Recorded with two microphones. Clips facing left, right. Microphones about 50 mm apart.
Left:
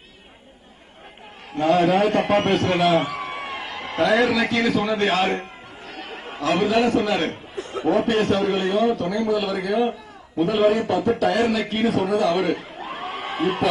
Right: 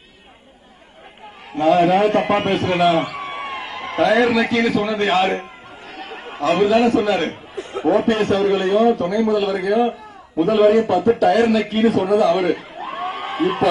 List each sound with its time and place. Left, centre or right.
1.5 s a man's voice: right
3.4 s a sound: centre
4.4 s a man's voice: centre
4.8 s a man's voice: right
5.3 s a sound: centre
6.4 s a man's voice: right
7.5 s a sound: right
8.2 s a man's voice: right
8.9 s a man's voice: right
11.7 s a man's voice: right
12.1 s a man's voice: right
12.5 s a sound: centre
13.4 s a man's voice: right